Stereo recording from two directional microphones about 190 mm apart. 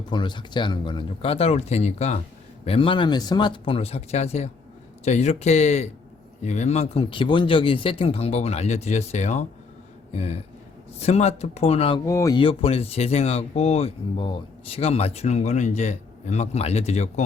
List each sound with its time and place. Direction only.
0.1 s speech: 25° left (ahead or behind)
12.0 s speech: 15° left (ahead or behind); by 17.2 s 35° left (ahead or behind)